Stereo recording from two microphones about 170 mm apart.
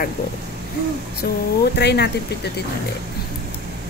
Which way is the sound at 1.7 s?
80° left.